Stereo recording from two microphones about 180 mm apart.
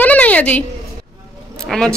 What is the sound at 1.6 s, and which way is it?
Keys jangling, 5° left (ahead or behind).